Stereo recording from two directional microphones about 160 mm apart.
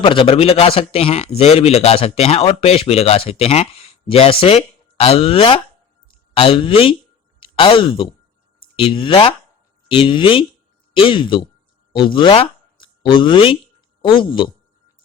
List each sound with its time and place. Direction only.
0.0 s speech: 35° left (ahead or behind)